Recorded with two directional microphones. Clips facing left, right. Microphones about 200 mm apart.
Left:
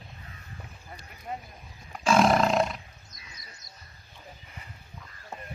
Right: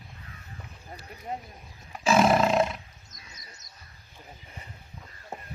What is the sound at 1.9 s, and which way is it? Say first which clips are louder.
Roaring cats: even; 5° right (ahead or behind).